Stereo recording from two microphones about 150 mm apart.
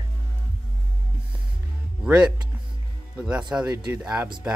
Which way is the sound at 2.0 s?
5° right (ahead or behind).